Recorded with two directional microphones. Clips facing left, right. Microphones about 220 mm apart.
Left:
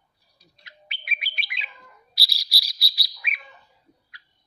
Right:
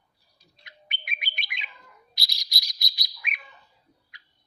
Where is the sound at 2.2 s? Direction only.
5° left (ahead or behind).